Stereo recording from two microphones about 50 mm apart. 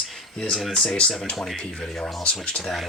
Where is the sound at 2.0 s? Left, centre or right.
Left.